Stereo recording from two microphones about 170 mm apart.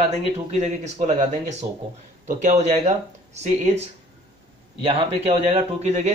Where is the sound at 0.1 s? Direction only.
40° right (ahead or behind).